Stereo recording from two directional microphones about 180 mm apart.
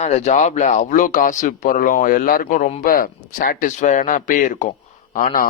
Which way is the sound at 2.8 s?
50° left (ahead or behind).